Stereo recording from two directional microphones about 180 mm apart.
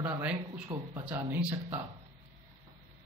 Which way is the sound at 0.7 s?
30° right (ahead or behind).